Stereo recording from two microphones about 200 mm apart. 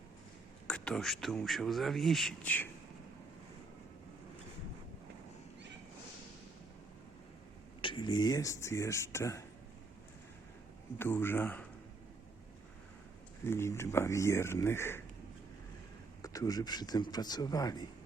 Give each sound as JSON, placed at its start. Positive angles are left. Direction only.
{"t": 0.7, "sound": "a man's voice", "side_deg": 5}
{"t": 7.8, "sound": "speech", "side_deg": 25}
{"t": 10.9, "sound": "speech", "side_deg": 10}
{"t": 13.4, "sound": "speech", "side_deg": 10}
{"t": 16.2, "sound": "speech", "side_deg": 15}